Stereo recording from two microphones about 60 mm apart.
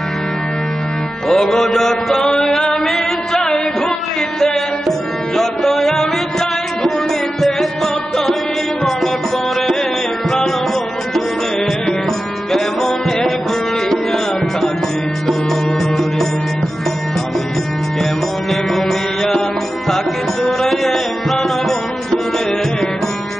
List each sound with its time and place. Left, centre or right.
1.3 s chant: centre
4.4 s music: centre
7.4 s music: centre
12.5 s music: centre
18.5 s music: centre
20.4 s music: centre